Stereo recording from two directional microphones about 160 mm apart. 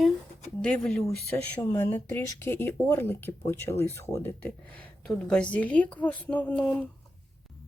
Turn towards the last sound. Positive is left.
turn(degrees=10)  # may be behind; listen again after turning